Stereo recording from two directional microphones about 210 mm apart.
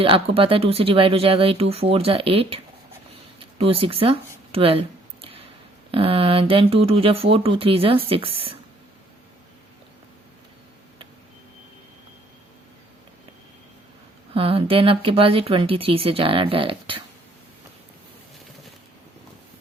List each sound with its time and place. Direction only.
0.0 s speech: 25° right (ahead or behind)
3.6 s speech: 25° right (ahead or behind)
5.9 s speech: 25° right (ahead or behind)
14.3 s speech: 25° right (ahead or behind)